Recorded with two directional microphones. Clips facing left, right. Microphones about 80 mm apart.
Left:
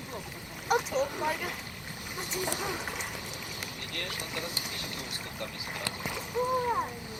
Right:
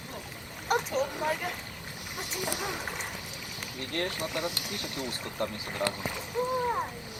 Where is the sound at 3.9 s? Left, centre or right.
Right.